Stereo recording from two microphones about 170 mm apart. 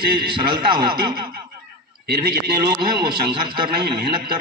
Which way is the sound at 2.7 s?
25° right (ahead or behind).